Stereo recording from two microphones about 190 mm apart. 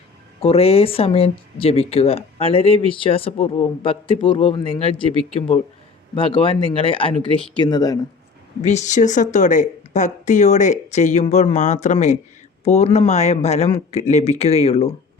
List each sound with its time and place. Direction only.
0.4 s speech: 30° left (ahead or behind)
8.6 s speech: 40° left (ahead or behind)